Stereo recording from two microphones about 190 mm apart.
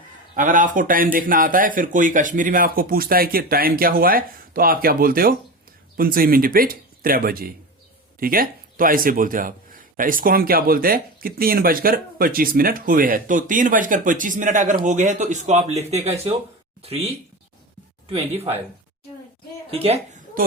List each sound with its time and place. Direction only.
0.3 s speech: 45° right (ahead or behind)
19.7 s a woman's voice: 30° right (ahead or behind)